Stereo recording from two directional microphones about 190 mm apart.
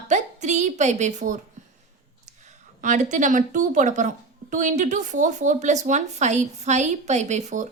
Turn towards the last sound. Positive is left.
turn(degrees=-40)  # may be behind; listen again after turning